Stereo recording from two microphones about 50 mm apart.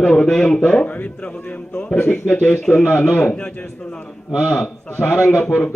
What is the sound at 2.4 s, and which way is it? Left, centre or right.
Speech, centre.